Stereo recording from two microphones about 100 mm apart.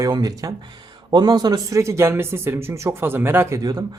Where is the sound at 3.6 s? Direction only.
40° right (ahead or behind).